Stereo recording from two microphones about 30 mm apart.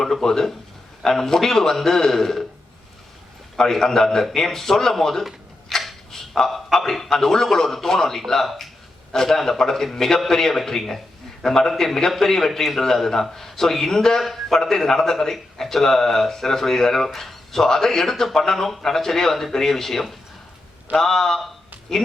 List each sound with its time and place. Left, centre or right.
0.0 s speech: centre
3.6 s speech: centre
5.7 s a sound: centre
6.1 s a sound: centre
6.5 s speech: centre
12.5 s speech: centre
12.8 s speech: centre